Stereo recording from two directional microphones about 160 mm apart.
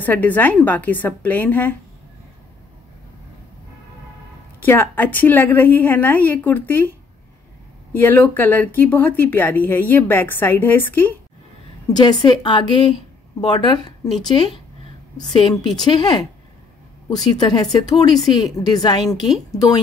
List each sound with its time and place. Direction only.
0.0 s speech: 10° left (ahead or behind)
4.6 s speech: 10° left (ahead or behind)
7.9 s speech: 15° left (ahead or behind)
11.9 s speech: 25° left (ahead or behind)